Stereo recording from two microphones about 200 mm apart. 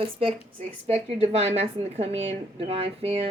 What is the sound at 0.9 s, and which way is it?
A woman's voice, 30° right (ahead or behind).